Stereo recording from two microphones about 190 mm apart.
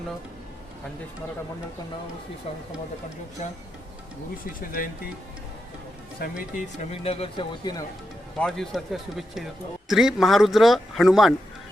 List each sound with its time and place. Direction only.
4.6 s speech: 50° left (ahead or behind)
6.2 s speech: 50° left (ahead or behind)
7.0 s speech: 30° left (ahead or behind)
8.4 s speech: centre (ahead or behind)